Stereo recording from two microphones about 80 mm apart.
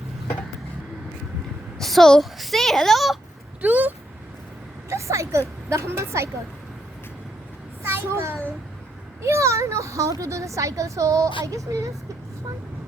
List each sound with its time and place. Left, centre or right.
1.8 s a woman's voice: centre
3.6 s speech: right
4.9 s speech: right
7.9 s a child's voice: right